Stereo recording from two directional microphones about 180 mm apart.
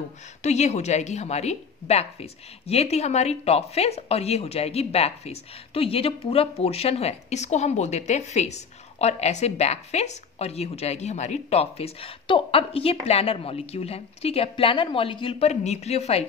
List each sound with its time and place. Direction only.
0.4 s a woman's voice: 40° left (ahead or behind)